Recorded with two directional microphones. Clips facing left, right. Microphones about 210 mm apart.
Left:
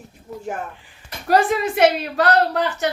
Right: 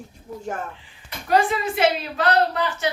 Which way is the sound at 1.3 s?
55° left (ahead or behind).